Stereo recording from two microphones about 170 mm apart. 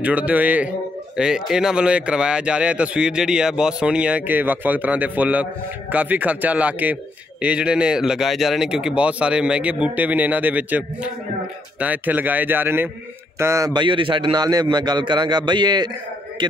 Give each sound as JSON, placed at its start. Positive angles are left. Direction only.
{"t": 0.0, "sound": "a man's voice", "side_deg": -10}